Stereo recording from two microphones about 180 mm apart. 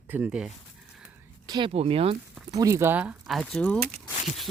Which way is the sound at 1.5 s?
30° right (ahead or behind).